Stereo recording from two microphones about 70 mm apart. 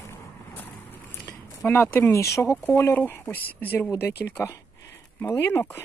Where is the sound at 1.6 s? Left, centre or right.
Left.